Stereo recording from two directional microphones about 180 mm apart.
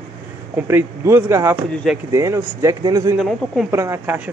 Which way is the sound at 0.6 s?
15° right (ahead or behind).